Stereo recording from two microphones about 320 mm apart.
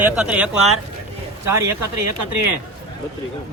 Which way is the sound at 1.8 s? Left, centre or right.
Right.